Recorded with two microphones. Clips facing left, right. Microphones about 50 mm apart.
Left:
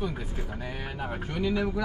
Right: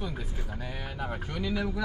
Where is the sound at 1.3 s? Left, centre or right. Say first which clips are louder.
Left 5 dB; centre.